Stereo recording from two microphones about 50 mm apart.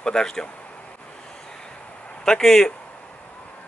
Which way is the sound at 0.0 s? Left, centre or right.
Centre.